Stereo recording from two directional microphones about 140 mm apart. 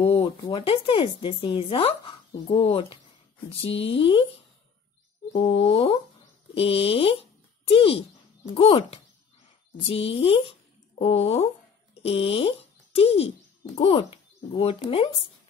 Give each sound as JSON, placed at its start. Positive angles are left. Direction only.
{"t": 0.0, "sound": "speech", "side_deg": 40}
{"t": 5.3, "sound": "a child's voice", "side_deg": 40}